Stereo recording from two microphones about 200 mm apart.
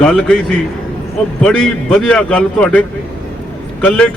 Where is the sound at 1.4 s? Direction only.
5° left (ahead or behind).